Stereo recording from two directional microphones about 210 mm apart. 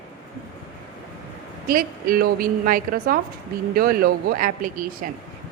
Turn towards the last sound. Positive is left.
turn(degrees=-40)  # may be behind; listen again after turning